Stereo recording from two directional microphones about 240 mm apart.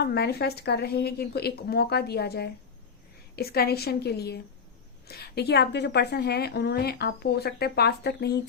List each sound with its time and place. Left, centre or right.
0.0 s a woman's voice: left